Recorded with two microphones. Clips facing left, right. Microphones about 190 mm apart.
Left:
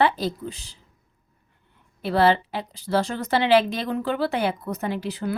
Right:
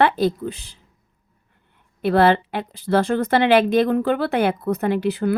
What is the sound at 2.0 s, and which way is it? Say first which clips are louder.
A woman's voice: right 4 dB; 55° right (ahead or behind).